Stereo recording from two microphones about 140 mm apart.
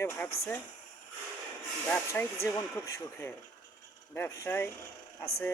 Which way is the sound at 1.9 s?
15° left (ahead or behind).